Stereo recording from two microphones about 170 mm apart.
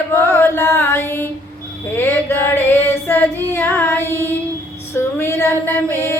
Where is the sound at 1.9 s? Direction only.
15° left (ahead or behind).